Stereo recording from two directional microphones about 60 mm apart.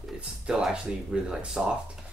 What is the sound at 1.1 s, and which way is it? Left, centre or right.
Speech, centre.